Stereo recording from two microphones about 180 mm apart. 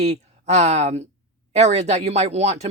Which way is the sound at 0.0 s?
40° right (ahead or behind).